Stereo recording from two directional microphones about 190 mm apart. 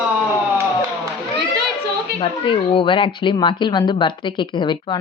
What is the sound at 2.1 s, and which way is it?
A woman's voice, 25° left (ahead or behind).